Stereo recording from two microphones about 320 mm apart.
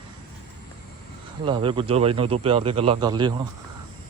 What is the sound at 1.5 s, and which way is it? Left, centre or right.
Speech, centre.